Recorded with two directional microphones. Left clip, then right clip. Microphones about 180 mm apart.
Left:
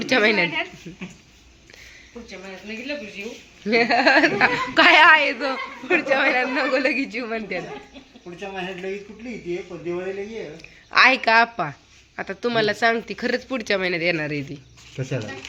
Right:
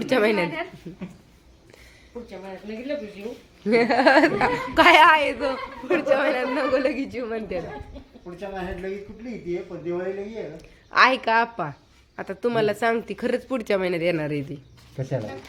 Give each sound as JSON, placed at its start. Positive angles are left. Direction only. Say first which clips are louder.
{"t": 0.0, "sound": "a woman's voice", "louder": "left 3 dB", "side_deg": -10}
{"t": 3.6, "sound": "speech", "louder": "left 1 dB", "side_deg": -20}
{"t": 4.4, "sound": "a woman's voice", "louder": "left 1 dB", "side_deg": 0}
{"t": 9.5, "sound": "a woman's voice", "louder": "even", "side_deg": 0}